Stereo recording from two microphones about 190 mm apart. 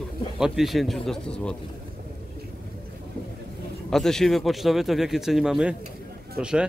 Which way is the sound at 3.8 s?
5° left (ahead or behind).